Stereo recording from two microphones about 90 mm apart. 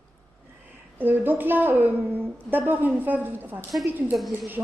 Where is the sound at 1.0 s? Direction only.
20° right (ahead or behind).